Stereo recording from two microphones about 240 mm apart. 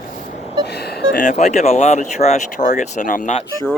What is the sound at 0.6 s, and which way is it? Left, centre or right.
Speech, left.